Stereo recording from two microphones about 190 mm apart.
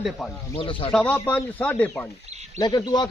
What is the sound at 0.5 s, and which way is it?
Speech, 30° left (ahead or behind).